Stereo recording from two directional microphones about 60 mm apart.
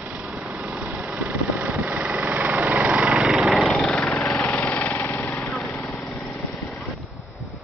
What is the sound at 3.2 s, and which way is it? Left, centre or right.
Engine, centre.